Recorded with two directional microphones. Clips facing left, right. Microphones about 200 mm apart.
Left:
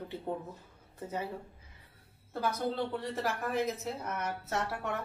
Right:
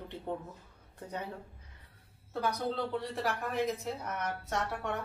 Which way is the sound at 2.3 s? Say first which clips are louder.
Left 1 dB; centre (ahead or behind).